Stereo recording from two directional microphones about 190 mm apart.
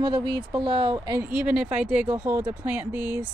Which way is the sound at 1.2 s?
5° right (ahead or behind).